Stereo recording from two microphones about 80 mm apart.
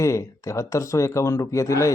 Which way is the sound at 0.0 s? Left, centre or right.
Left.